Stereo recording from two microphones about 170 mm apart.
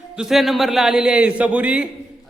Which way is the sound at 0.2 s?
Centre (ahead or behind).